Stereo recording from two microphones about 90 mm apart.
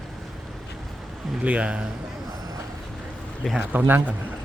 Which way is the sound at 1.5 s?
15° right (ahead or behind).